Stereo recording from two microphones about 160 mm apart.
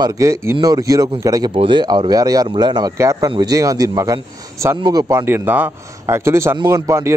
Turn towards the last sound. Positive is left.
turn(degrees=-20)  # may be behind; listen again after turning